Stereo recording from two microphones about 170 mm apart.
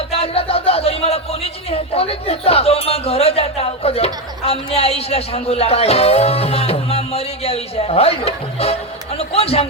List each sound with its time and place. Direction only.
0.1 s speech: 35° left (ahead or behind)